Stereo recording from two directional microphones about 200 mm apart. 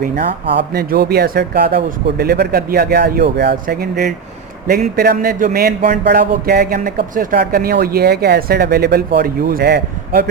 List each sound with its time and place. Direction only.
0.5 s speech: 50° right (ahead or behind)